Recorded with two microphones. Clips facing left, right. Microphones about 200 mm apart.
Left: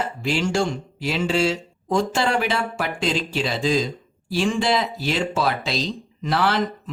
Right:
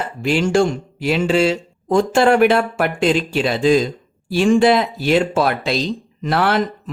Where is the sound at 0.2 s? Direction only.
55° right (ahead or behind).